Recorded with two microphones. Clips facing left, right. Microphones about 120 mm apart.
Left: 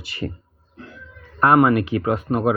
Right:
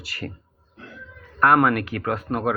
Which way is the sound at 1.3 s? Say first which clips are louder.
Left 3 dB; 20° left (ahead or behind).